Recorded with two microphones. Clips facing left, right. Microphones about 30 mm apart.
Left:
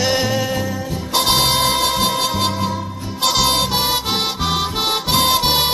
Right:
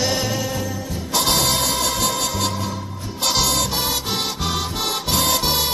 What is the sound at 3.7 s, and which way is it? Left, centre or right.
Music, centre.